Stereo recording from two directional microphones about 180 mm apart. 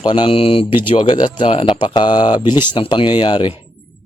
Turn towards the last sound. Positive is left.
turn(degrees=25)  # may be behind; listen again after turning